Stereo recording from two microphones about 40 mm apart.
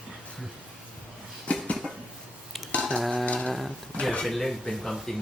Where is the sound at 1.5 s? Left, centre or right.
Left.